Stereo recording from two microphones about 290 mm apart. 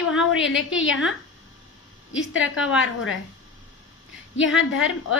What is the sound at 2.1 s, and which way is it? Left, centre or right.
Speech, left.